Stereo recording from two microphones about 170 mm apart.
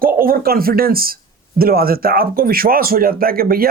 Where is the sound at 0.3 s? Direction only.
60° right (ahead or behind).